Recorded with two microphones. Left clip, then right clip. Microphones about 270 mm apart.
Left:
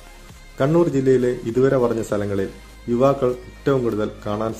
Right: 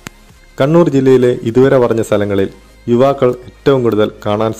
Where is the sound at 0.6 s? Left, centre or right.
Right.